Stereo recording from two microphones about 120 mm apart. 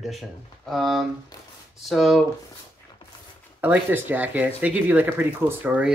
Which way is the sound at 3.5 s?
15° right (ahead or behind).